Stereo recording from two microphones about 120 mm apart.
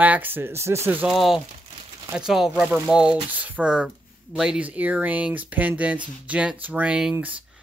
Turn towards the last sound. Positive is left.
turn(degrees=-10)  # may be behind; listen again after turning